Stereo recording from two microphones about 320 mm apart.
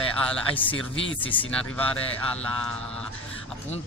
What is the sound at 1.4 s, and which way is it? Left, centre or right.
Speech, centre.